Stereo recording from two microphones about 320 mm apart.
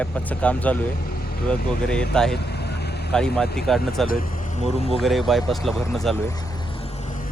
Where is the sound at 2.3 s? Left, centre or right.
Left.